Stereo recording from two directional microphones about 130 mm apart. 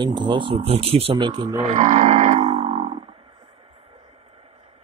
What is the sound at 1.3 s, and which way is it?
Speech, 35° right (ahead or behind).